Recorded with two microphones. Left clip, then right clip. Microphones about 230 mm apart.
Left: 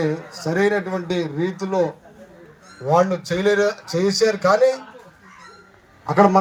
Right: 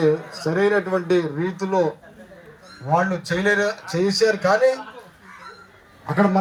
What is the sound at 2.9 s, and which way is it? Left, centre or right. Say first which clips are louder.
A man's voice: left 2 dB; left.